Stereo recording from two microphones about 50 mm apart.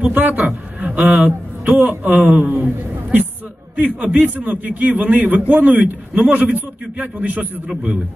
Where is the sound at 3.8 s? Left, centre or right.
Right.